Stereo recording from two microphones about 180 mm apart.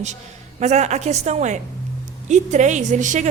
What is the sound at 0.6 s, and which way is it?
A woman's voice, 40° right (ahead or behind).